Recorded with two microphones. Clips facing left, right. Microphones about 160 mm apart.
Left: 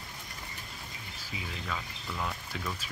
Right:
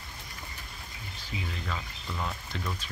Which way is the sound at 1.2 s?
Centre (ahead or behind).